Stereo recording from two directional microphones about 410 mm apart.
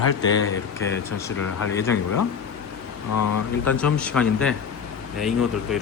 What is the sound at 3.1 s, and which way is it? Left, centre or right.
Speech, left.